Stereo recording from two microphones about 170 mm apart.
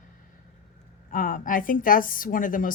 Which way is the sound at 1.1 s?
50° left (ahead or behind).